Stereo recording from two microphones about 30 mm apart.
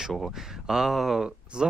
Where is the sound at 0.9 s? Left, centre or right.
Centre.